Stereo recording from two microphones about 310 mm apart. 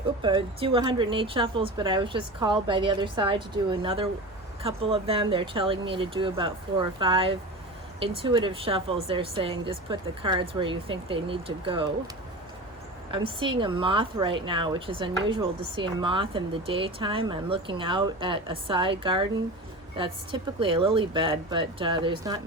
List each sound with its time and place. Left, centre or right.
0.2 s speech: centre
13.1 s speech: centre